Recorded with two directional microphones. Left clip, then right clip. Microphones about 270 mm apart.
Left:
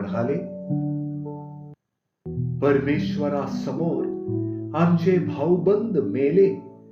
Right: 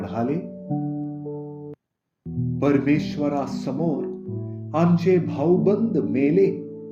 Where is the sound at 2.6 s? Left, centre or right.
Right.